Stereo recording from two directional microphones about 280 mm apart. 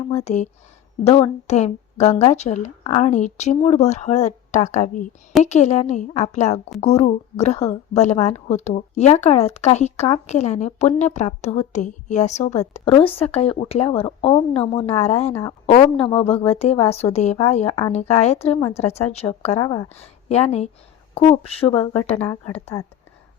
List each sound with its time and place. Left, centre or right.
0.3 s a woman's voice: left